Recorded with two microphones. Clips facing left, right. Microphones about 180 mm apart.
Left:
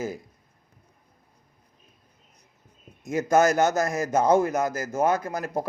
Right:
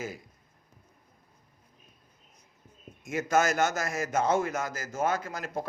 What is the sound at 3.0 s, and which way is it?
A man's voice, 35° left (ahead or behind).